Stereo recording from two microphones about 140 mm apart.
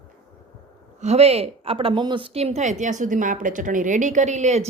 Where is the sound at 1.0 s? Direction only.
50° right (ahead or behind).